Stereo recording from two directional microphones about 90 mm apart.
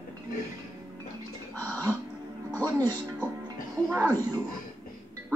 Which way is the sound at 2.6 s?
50° right (ahead or behind).